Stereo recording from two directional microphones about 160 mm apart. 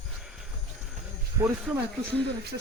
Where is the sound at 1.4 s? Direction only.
20° right (ahead or behind).